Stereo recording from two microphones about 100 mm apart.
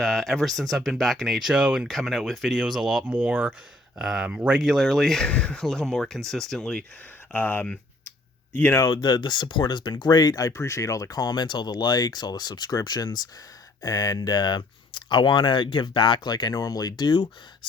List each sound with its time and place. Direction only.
0.0 s speech: 5° left (ahead or behind)
3.1 s speech: 15° right (ahead or behind); by 6.8 s 5° left (ahead or behind)
7.3 s speech: 20° left (ahead or behind)
8.9 s speech: 45° left (ahead or behind)